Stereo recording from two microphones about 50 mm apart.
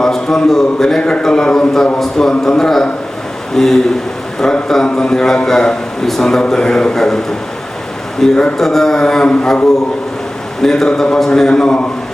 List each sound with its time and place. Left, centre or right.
0.0 s a man's voice: centre
8.2 s a man's voice: centre
8.5 s a man's voice: centre
10.6 s a man's voice: centre